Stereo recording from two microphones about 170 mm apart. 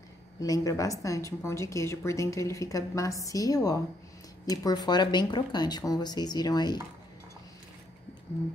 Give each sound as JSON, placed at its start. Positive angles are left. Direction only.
{"t": 0.4, "sound": "speech", "side_deg": 20}